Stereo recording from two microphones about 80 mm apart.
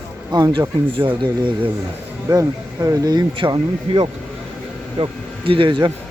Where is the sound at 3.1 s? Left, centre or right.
Right.